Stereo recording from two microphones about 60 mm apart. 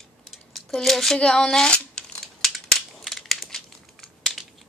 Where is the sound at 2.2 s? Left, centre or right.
Centre.